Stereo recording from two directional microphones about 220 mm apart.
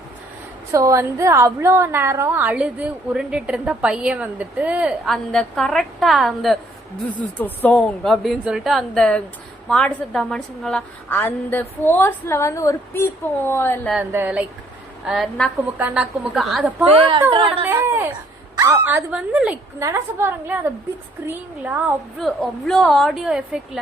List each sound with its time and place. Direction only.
0.7 s a woman's voice: 15° right (ahead or behind); by 13.9 s 10° left (ahead or behind)
13.9 s a woman's voice: 10° right (ahead or behind)
17.0 s speech: 25° right (ahead or behind)
17.7 s a woman's voice: 10° right (ahead or behind)